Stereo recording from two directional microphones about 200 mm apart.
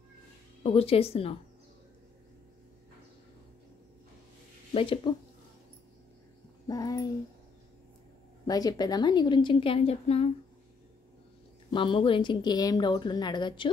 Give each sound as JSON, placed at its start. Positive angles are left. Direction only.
{"t": 0.7, "sound": "a woman's voice", "side_deg": 30}
{"t": 4.7, "sound": "a woman's voice", "side_deg": 25}
{"t": 6.7, "sound": "a sound", "side_deg": 15}
{"t": 8.5, "sound": "a woman's voice", "side_deg": 20}
{"t": 11.7, "sound": "a woman's voice", "side_deg": 25}